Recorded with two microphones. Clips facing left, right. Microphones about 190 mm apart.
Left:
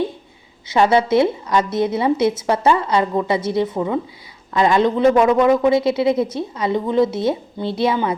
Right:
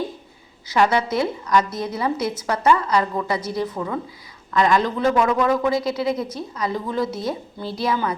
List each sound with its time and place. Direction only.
0.7 s a man's voice: 25° left (ahead or behind)